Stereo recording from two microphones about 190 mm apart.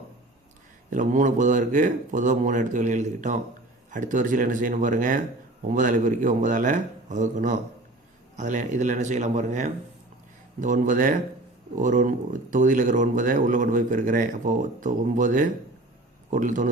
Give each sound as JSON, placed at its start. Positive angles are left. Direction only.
{"t": 0.9, "sound": "speech", "side_deg": -40}